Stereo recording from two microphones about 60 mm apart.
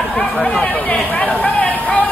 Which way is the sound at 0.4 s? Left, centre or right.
Centre.